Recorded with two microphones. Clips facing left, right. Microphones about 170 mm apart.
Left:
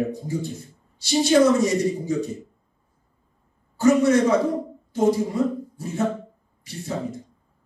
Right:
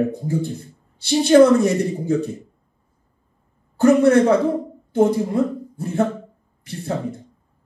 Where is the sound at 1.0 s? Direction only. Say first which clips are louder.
Right 5 dB; 60° right (ahead or behind).